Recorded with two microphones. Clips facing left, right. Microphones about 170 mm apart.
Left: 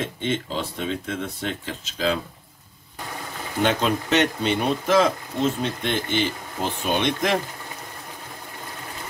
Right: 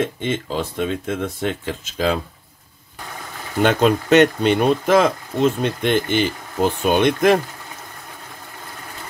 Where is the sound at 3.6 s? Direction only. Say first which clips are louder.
Right 6 dB; 55° right (ahead or behind).